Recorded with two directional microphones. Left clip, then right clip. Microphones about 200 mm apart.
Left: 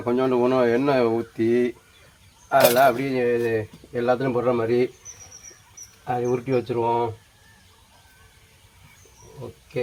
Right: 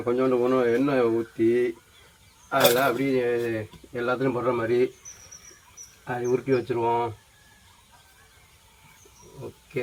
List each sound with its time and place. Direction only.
0.0 s speech: 45° left (ahead or behind)
6.1 s speech: 50° left (ahead or behind)